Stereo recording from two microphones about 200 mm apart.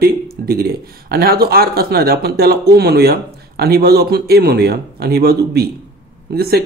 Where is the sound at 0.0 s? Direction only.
50° right (ahead or behind).